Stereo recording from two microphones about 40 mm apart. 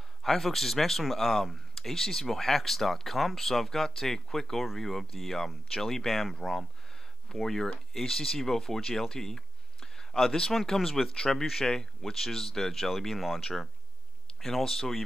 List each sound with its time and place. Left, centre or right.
0.2 s speech: centre
14.4 s speech: centre